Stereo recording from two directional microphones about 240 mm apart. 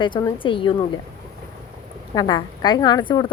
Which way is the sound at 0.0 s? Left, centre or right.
Centre.